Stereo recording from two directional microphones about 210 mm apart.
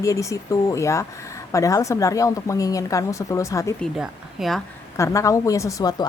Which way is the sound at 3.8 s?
Centre (ahead or behind).